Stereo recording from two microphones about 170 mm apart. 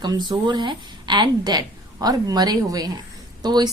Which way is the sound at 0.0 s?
25° right (ahead or behind).